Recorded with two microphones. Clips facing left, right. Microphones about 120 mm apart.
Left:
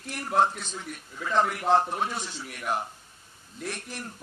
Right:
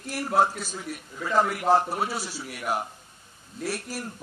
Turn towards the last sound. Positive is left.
turn(degrees=-5)  # may be behind; listen again after turning